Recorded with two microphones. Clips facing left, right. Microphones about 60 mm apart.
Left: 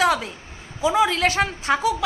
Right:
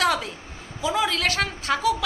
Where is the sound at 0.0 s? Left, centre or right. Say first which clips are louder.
Left 3 dB; centre.